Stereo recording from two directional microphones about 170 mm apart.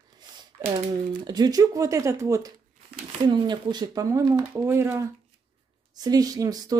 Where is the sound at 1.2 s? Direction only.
25° right (ahead or behind).